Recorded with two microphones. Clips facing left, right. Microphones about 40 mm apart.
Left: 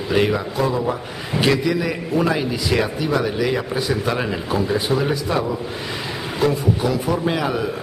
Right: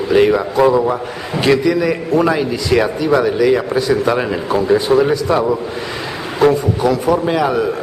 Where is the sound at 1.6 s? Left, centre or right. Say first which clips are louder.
Right 6 dB; centre.